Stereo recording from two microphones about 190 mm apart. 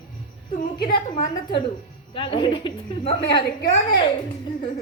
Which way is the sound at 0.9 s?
45° left (ahead or behind).